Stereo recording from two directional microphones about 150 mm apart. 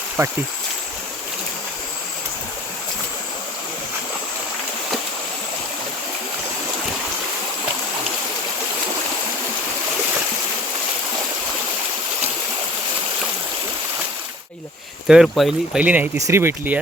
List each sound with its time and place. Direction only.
0.2 s speech: 20° right (ahead or behind)
15.0 s speech: 5° right (ahead or behind)